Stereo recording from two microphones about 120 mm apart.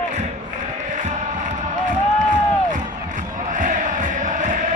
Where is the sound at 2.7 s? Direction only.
90° right.